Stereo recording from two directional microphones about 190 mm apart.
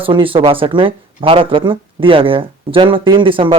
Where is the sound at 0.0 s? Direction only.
30° right (ahead or behind).